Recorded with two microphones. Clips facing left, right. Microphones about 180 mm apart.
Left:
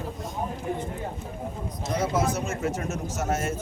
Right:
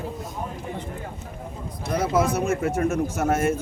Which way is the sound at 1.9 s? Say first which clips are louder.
Right 4 dB; 55° right (ahead or behind).